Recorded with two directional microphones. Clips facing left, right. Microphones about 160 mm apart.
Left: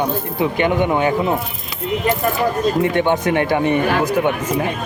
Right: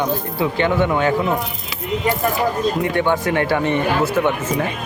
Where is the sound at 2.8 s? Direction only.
20° left (ahead or behind).